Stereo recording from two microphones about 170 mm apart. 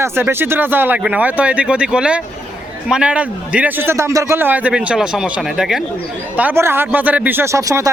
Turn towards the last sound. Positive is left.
turn(degrees=-20)  # may be behind; listen again after turning